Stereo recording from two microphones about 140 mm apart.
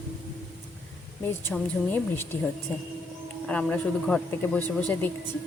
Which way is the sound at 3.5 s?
10° left (ahead or behind).